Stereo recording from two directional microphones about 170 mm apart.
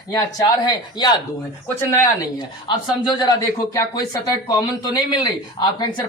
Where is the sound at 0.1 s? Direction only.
20° left (ahead or behind).